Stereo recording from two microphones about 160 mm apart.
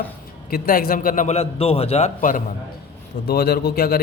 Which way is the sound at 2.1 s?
55° left (ahead or behind).